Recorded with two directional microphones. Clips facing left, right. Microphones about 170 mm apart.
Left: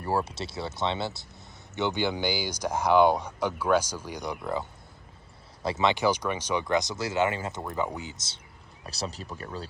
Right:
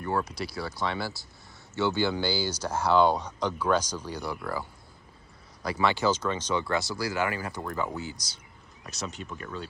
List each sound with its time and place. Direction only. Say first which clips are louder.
0.0 s speech: left 1 dB; 30° left (ahead or behind)
5.6 s speech: left 1 dB; 20° left (ahead or behind)